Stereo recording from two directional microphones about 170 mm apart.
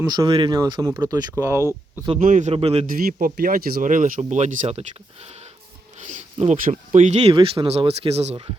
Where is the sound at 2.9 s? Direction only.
55° right (ahead or behind).